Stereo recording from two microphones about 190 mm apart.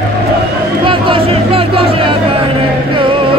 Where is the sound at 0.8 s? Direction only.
25° right (ahead or behind).